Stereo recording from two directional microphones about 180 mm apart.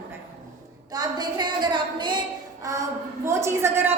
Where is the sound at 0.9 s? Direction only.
25° right (ahead or behind).